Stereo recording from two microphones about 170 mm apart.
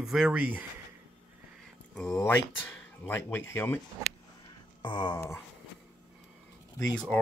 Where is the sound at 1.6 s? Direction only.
5° left (ahead or behind).